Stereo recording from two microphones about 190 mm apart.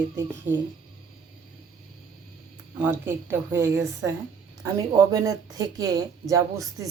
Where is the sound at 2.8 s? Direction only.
10° right (ahead or behind).